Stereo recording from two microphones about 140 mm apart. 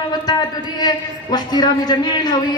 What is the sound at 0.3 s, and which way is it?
A man's voice, 30° left (ahead or behind).